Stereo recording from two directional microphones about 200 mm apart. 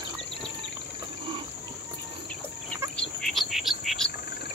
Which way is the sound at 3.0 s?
Centre (ahead or behind).